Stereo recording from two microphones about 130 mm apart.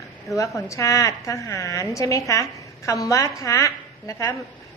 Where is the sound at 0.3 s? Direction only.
25° left (ahead or behind).